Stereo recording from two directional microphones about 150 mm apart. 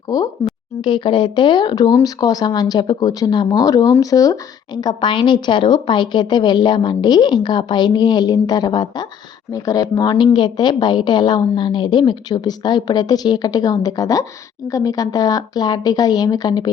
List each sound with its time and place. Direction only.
0.1 s a woman's voice: 25° left (ahead or behind)